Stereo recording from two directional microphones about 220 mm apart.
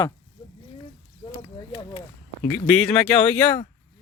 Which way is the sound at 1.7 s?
20° left (ahead or behind).